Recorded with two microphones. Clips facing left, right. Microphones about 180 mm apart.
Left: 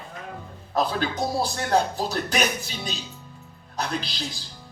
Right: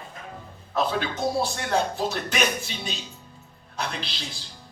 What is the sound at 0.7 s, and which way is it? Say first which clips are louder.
Speech: left 1 dB; 40° left (ahead or behind).